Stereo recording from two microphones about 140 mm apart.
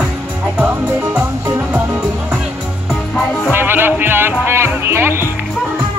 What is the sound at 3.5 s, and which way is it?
Music, 15° right (ahead or behind).